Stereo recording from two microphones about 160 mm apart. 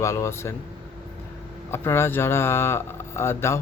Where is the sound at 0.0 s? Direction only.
20° left (ahead or behind).